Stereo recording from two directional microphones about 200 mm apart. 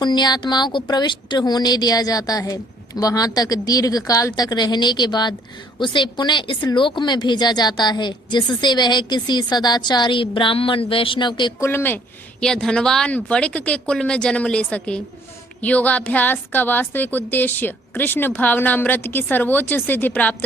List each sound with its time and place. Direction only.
0.0 s speech: 20° left (ahead or behind)
11.7 s a woman's voice: 10° left (ahead or behind)